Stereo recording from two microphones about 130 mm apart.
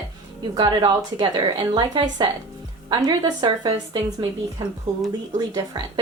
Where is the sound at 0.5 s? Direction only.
35° right (ahead or behind).